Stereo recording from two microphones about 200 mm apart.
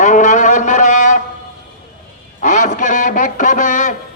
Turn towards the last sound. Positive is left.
turn(degrees=40)  # may be behind; listen again after turning